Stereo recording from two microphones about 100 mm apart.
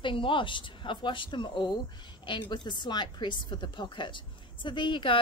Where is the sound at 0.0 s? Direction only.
60° left (ahead or behind).